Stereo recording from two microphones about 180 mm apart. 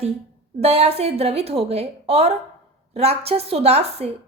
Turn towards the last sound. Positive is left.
turn(degrees=-35)  # may be behind; listen again after turning